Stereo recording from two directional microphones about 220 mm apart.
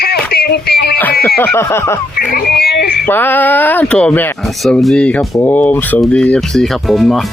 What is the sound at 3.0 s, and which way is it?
Speech, 10° left (ahead or behind).